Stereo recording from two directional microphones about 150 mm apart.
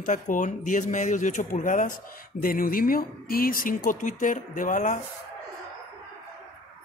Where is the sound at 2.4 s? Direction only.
70° left (ahead or behind).